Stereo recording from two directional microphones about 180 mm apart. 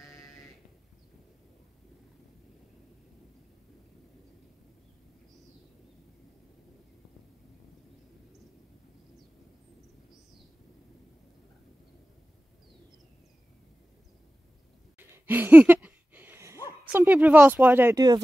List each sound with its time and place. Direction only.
0.1 s sheep: 20° left (ahead or behind)
15.0 s a sound: 10° right (ahead or behind)
16.9 s speech: 10° right (ahead or behind)